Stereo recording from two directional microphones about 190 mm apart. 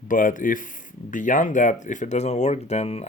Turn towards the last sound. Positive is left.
turn(degrees=35)  # may be behind; listen again after turning